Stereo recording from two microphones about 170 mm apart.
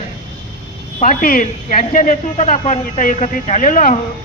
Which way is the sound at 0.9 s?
50° left (ahead or behind).